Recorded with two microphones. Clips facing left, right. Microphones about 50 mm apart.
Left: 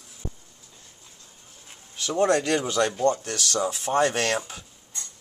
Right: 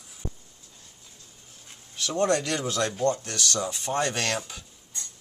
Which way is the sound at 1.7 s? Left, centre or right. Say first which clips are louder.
Left 2 dB; centre.